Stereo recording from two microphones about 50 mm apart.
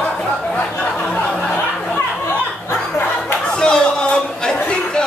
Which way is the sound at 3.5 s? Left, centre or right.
Centre.